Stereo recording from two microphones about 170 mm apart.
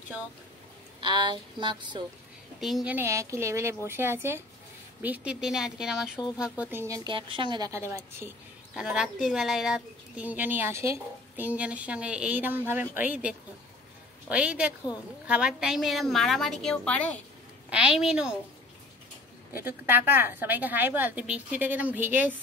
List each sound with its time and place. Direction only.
1.0 s a woman's voice: 30° right (ahead or behind)
2.6 s a woman's voice: 5° right (ahead or behind)
6.6 s speech: 15° right (ahead or behind)
7.1 s a woman's voice: 30° right (ahead or behind); by 8.3 s 15° right (ahead or behind)
8.7 s a woman's voice: 5° right (ahead or behind)
17.6 s a woman's voice: 5° right (ahead or behind)
19.6 s speech: 10° right (ahead or behind)